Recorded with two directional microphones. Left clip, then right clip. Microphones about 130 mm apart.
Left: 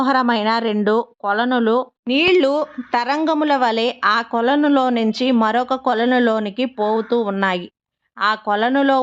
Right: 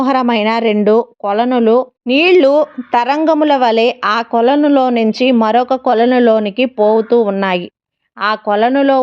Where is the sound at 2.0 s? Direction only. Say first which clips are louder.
Right 6 dB; 30° right (ahead or behind).